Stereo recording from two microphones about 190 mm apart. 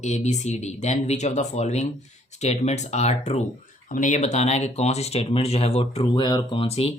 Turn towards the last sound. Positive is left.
turn(degrees=30)  # may be behind; listen again after turning